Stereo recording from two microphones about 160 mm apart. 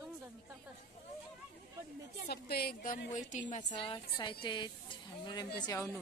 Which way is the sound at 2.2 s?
85° left.